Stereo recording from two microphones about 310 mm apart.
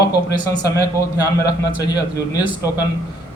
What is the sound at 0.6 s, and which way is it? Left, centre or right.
A man's voice, centre.